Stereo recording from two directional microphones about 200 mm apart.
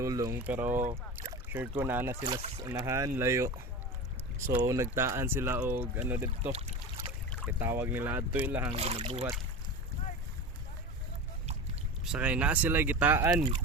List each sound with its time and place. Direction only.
0.0 s speech: 15° right (ahead or behind)
0.7 s speech: 40° right (ahead or behind)
1.8 s speech: 10° right (ahead or behind)
4.5 s speech: 15° right (ahead or behind)
6.4 s speech: 30° right (ahead or behind)
7.4 s speech: 10° right (ahead or behind)
8.7 s speech: 30° right (ahead or behind)
12.0 s speech: 5° right (ahead or behind)